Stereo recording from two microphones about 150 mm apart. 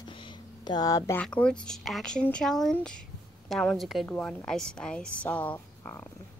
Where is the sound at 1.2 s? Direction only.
5° left (ahead or behind).